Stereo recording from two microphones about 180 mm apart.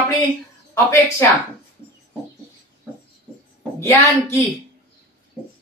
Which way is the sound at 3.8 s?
15° left (ahead or behind).